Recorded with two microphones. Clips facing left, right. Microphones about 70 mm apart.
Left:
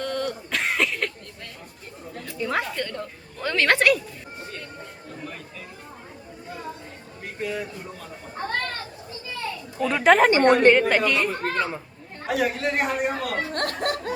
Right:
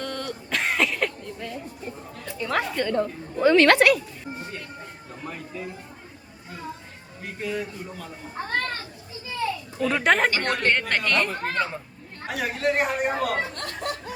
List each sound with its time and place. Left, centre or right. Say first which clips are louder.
0.0 s a sound: left 4 dB; centre
2.4 s speech: right 1 dB; centre
2.9 s speech: right 9 dB; right
3.5 s speech: right 2 dB; centre
5.2 s a sound: right 5 dB; centre
7.3 s speech: even; centre
9.7 s speech: left 4 dB; centre
10.3 s a woman's voice: left 9 dB; left
10.7 s speech: left 6 dB; centre
13.5 s speech: left 5 dB; left